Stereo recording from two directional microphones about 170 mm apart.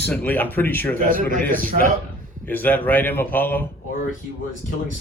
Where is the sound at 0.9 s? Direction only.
55° right (ahead or behind).